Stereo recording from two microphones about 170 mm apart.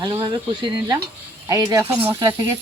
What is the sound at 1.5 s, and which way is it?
Speech, 20° right (ahead or behind).